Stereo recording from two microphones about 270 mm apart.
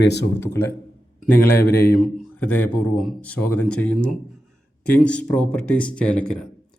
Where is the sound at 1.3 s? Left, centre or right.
Centre.